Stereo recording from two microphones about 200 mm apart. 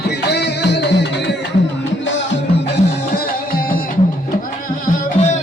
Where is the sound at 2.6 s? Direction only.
50° left (ahead or behind).